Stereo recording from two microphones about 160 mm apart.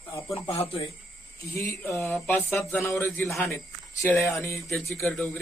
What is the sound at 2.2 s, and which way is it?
Speech, 15° left (ahead or behind).